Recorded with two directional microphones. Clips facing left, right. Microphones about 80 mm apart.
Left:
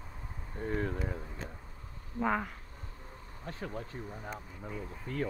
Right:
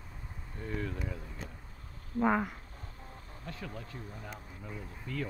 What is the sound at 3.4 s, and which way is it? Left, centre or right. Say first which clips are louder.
Speech: left 4 dB; left.